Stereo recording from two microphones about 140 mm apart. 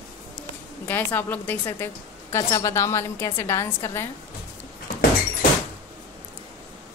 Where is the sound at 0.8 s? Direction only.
15° left (ahead or behind).